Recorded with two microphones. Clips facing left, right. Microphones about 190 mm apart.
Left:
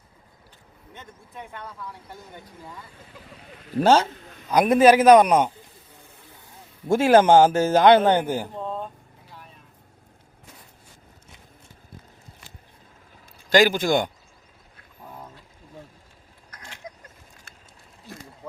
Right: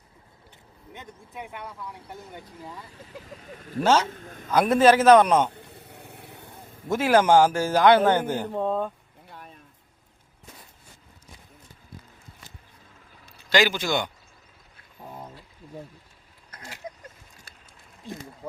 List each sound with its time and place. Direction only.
0.9 s speech: 15° right (ahead or behind)
2.9 s speech: 40° right (ahead or behind)
3.8 s speech: 35° left (ahead or behind)
4.4 s a man's voice: 15° left (ahead or behind)
5.5 s a sound: 65° right (ahead or behind)
6.8 s speech: 30° left (ahead or behind)
8.5 s vehicle: 55° right (ahead or behind)
13.5 s a man's voice: 50° left (ahead or behind)
15.0 s a sound: 10° right (ahead or behind)